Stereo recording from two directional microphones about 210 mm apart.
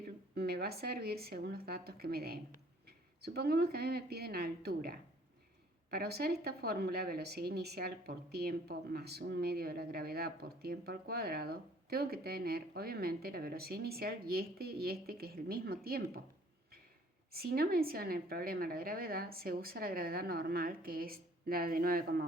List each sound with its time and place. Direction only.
0.3 s speech: 50° right (ahead or behind)
17.3 s speech: 45° right (ahead or behind)